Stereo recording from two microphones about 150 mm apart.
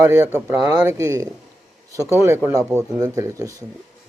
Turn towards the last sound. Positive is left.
turn(degrees=-20)  # may be behind; listen again after turning